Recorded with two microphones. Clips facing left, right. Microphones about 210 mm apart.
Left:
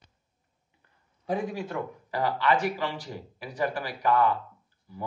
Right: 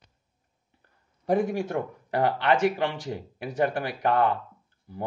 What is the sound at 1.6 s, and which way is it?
A man's voice, 60° right (ahead or behind).